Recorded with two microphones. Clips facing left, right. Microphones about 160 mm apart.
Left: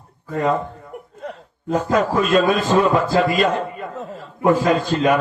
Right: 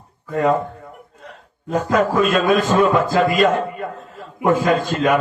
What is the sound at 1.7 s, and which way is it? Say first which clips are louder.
A man's voice: right 1 dB; 45° right (ahead or behind).